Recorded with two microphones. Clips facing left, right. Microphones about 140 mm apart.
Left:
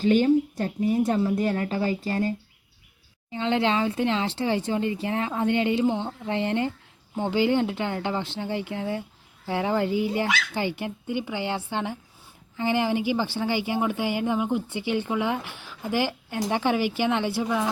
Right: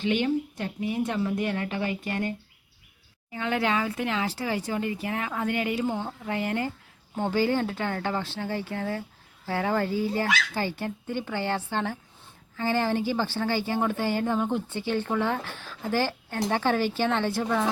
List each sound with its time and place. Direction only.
0.0 s a woman's voice: 40° left (ahead or behind)
3.3 s speech: 25° left (ahead or behind)